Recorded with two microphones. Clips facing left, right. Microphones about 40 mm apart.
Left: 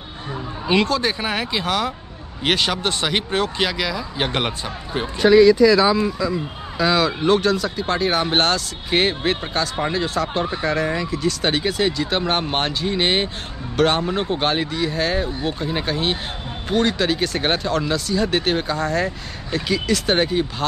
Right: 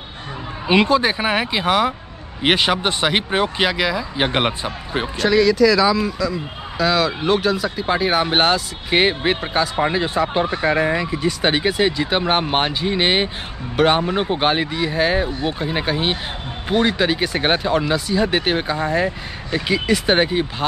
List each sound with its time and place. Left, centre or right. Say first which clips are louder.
0.7 s speech: right 3 dB; centre
5.2 s speech: left 3 dB; centre
6.8 s speech: even; centre